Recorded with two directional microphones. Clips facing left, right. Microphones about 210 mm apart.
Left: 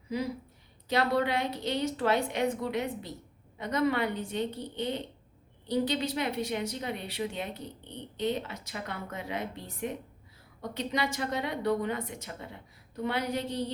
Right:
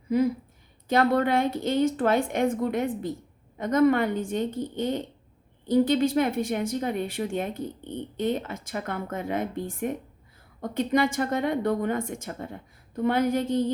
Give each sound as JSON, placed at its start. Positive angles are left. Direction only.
{"t": 0.1, "sound": "a woman's voice", "side_deg": -50}